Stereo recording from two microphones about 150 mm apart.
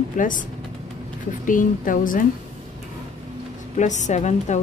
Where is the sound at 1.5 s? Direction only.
60° left (ahead or behind).